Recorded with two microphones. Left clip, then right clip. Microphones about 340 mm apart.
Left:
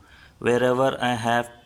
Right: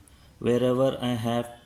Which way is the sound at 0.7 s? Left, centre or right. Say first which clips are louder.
Left 3 dB; left.